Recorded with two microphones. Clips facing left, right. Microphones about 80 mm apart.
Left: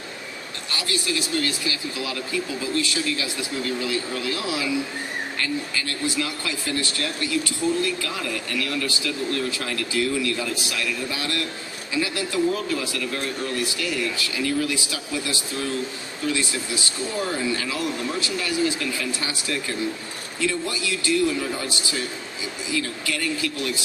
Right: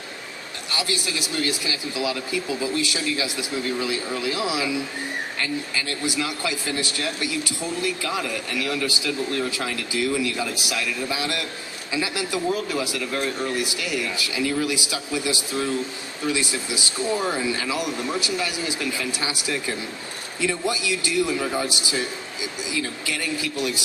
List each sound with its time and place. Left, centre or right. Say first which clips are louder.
0.7 s speech: even; right